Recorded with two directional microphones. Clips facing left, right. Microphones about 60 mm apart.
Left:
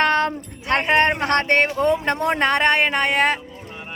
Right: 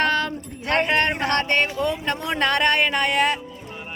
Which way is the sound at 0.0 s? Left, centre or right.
Left.